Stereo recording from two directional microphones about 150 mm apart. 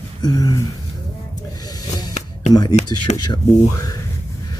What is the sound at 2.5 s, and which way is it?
Speech, 25° left (ahead or behind).